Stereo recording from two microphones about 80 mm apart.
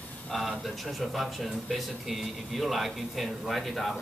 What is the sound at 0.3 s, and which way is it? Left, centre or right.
Speech, centre.